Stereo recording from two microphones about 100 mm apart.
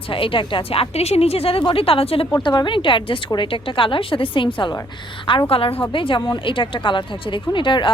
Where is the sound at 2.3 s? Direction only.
45° left (ahead or behind).